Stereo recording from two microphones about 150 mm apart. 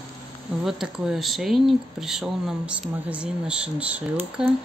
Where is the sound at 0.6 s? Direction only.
Centre (ahead or behind).